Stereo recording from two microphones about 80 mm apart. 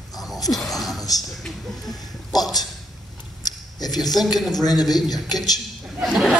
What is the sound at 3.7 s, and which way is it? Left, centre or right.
A man's voice, left.